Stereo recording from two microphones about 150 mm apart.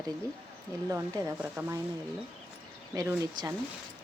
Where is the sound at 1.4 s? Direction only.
15° right (ahead or behind).